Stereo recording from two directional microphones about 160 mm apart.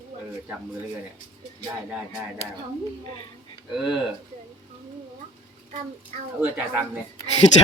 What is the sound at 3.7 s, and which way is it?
Speech, centre (ahead or behind).